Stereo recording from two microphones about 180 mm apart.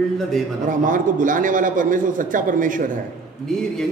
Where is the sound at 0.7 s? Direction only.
45° right (ahead or behind).